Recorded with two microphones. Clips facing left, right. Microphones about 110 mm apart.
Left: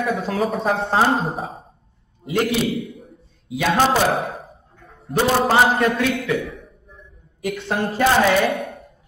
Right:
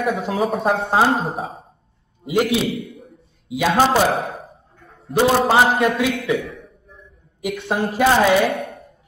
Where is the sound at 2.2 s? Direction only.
15° right (ahead or behind).